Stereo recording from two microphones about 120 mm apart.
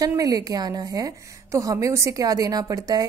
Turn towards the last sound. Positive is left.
turn(degrees=-30)  # may be behind; listen again after turning